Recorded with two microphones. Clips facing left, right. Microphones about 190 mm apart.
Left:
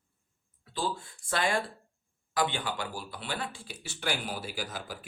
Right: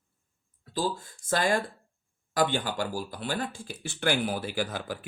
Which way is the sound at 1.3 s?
40° right (ahead or behind).